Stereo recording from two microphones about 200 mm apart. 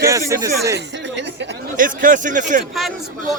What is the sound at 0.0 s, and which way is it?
Speech, 15° right (ahead or behind).